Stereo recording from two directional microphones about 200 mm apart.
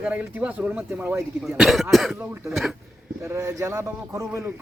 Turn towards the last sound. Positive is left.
turn(degrees=-15)  # may be behind; listen again after turning